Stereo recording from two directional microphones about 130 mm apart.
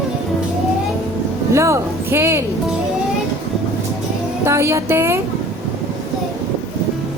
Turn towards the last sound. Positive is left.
turn(degrees=-20)  # may be behind; listen again after turning